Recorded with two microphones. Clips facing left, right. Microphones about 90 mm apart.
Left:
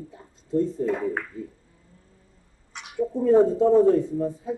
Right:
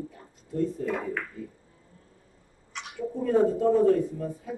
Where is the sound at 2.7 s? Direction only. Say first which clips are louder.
Left 6 dB; 25° left (ahead or behind).